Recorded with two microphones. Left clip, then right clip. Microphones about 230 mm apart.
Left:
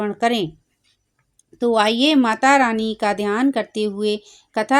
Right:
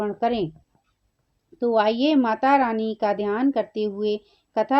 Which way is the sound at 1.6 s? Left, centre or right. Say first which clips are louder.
Left 3 dB; left.